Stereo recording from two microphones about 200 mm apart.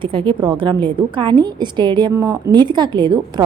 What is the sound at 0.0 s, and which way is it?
A woman's voice, 25° right (ahead or behind).